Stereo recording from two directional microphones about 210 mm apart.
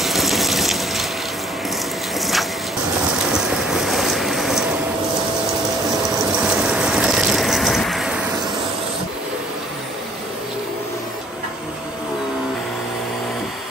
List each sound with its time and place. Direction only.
0.0 s water: centre (ahead or behind)
2.1 s a sound: centre (ahead or behind)
3.2 s vehicle: 5° right (ahead or behind)
6.3 s vehicle: 5° right (ahead or behind)